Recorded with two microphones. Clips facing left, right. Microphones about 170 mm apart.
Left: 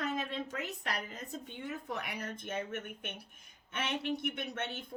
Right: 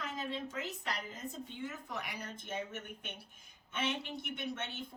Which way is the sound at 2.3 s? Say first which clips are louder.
Left 3 dB; 60° left (ahead or behind).